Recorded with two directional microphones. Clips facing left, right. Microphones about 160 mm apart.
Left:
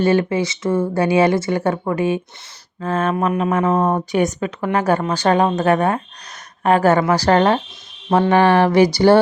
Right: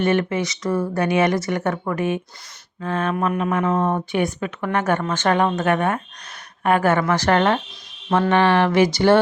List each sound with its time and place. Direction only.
0.0 s speech: 30° left (ahead or behind)
2.8 s speech: 40° left (ahead or behind)